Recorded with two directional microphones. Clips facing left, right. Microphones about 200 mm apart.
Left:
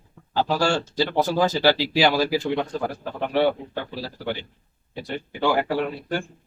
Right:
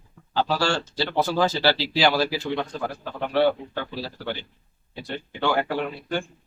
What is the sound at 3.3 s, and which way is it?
Speech, 15° left (ahead or behind).